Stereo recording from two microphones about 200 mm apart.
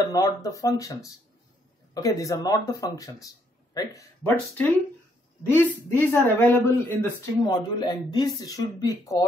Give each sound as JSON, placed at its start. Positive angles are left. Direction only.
{"t": 0.1, "sound": "a man's voice", "side_deg": 15}